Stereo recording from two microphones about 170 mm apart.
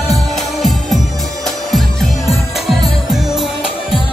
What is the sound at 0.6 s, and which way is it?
Music, centre (ahead or behind).